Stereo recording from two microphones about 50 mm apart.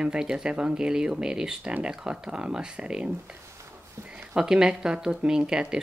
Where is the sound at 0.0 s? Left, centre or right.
Centre.